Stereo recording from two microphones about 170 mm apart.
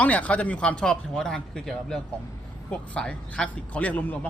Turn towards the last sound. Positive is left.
turn(degrees=10)  # may be behind; listen again after turning